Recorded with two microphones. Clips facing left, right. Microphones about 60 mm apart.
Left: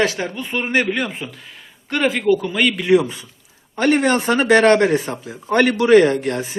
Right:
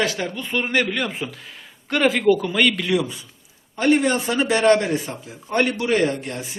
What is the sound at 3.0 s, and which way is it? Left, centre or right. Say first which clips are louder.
Speech: left 3 dB; left.